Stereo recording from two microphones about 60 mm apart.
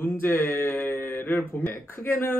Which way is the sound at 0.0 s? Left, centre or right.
Left.